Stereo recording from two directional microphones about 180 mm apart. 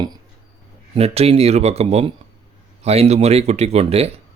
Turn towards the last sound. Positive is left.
turn(degrees=-35)  # may be behind; listen again after turning